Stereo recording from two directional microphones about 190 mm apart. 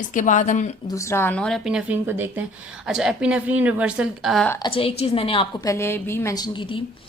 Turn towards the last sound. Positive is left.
turn(degrees=25)  # may be behind; listen again after turning